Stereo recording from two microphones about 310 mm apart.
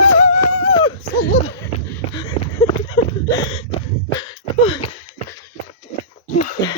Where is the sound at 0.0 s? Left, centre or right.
Left.